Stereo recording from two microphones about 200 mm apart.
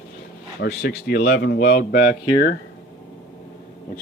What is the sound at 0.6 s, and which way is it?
Speech, 55° left (ahead or behind).